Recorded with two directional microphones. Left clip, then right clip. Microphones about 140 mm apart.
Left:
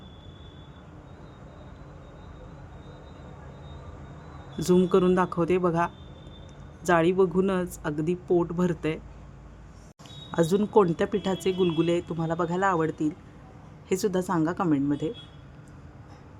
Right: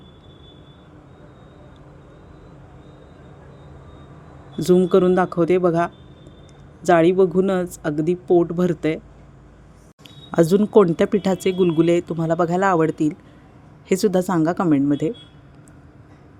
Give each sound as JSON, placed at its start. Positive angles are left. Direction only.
{"t": 4.5, "sound": "speech", "side_deg": -35}
{"t": 10.3, "sound": "speech", "side_deg": -50}